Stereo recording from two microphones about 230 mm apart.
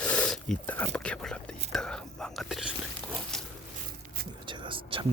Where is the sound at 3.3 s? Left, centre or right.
Centre.